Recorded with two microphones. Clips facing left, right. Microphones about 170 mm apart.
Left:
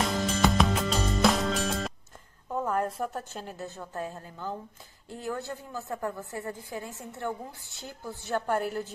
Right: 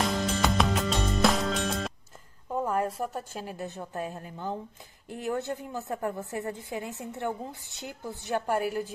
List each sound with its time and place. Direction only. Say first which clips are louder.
0.0 s music: left 1 dB; centre (ahead or behind)
2.5 s a woman's voice: right 1 dB; 10° right (ahead or behind)